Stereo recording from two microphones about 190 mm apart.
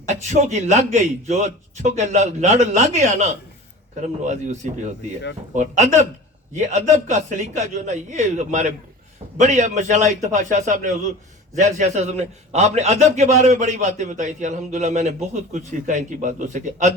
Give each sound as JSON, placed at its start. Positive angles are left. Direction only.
{"t": 0.1, "sound": "a man's voice", "side_deg": -40}